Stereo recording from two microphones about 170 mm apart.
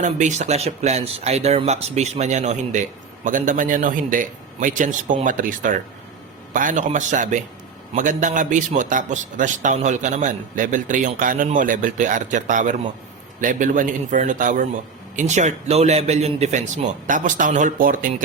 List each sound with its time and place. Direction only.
0.0 s a man's voice: 45° right (ahead or behind)